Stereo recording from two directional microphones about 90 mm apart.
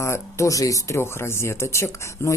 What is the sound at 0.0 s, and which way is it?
Speech, 30° left (ahead or behind).